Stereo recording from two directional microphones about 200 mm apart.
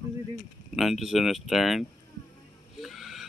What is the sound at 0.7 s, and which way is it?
Speech, centre (ahead or behind).